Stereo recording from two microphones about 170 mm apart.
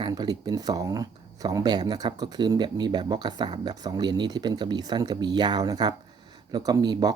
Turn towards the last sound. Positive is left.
turn(degrees=-25)  # may be behind; listen again after turning